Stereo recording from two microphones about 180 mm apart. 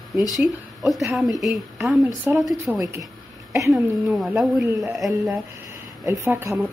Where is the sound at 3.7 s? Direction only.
Centre (ahead or behind).